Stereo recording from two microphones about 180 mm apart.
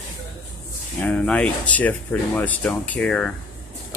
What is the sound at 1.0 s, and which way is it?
Speech, 5° left (ahead or behind).